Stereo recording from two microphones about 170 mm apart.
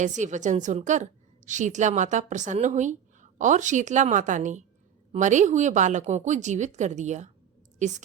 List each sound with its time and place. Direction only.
0.0 s a woman's voice: 45° right (ahead or behind)